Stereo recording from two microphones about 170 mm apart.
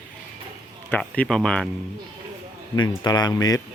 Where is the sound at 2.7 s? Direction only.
25° left (ahead or behind).